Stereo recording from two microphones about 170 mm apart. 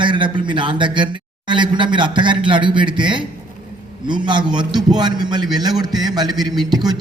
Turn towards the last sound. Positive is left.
turn(degrees=-25)  # may be behind; listen again after turning